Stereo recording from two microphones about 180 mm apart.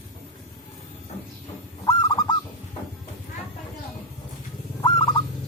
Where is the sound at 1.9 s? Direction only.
25° left (ahead or behind).